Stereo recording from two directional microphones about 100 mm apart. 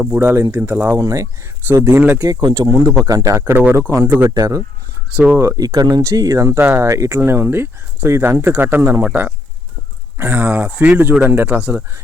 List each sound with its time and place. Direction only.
0.0 s speech: 20° right (ahead or behind)
0.9 s speech: 30° right (ahead or behind)
2.2 s speech: 40° right (ahead or behind); by 4.3 s 25° right (ahead or behind)
4.4 s speech: 35° right (ahead or behind); by 11.8 s 15° right (ahead or behind)